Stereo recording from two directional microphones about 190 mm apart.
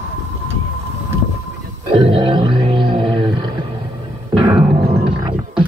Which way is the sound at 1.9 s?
25° right (ahead or behind).